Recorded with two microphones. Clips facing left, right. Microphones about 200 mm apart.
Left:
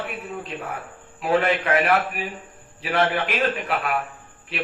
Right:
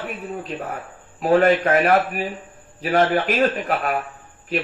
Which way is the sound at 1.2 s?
45° right (ahead or behind).